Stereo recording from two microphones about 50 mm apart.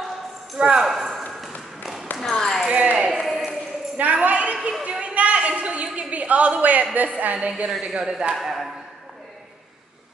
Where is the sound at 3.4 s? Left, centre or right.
Centre.